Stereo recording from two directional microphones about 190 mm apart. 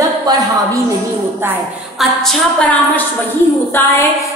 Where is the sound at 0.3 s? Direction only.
20° right (ahead or behind).